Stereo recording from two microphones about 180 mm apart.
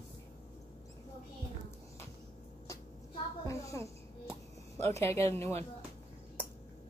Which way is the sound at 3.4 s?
15° left (ahead or behind).